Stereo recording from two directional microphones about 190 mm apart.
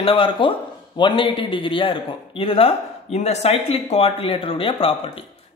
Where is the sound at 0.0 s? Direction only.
30° left (ahead or behind).